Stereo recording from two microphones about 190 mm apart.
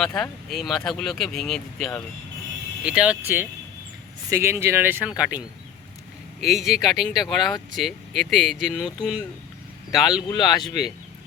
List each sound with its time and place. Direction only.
0.2 s speech: centre (ahead or behind)
6.4 s speech: centre (ahead or behind)
10.2 s speech: 20° left (ahead or behind)
10.6 s speech: centre (ahead or behind)